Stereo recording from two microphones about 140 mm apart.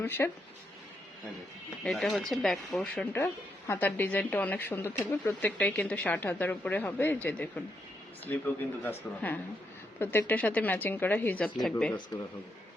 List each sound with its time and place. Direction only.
0.0 s speech: 15° left (ahead or behind)
1.8 s speech: centre (ahead or behind)
8.8 s speech: 10° left (ahead or behind)